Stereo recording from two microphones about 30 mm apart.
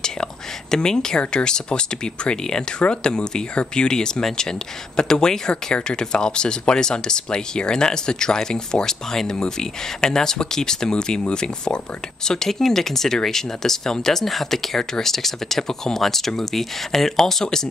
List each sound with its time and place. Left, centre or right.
0.0 s whispering: left
1.3 s speech: left
9.1 s speech: centre
9.4 s speech: left
12.4 s speech: centre